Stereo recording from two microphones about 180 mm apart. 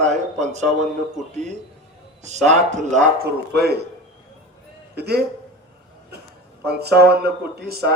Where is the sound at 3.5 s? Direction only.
65° right (ahead or behind).